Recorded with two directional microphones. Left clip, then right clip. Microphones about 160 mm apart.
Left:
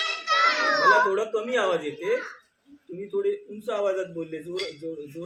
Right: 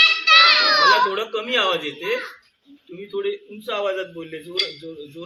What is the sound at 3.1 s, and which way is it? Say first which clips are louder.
A man's voice: right 1 dB; centre (ahead or behind).